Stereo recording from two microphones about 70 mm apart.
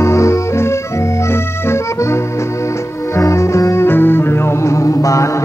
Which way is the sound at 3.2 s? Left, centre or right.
Left.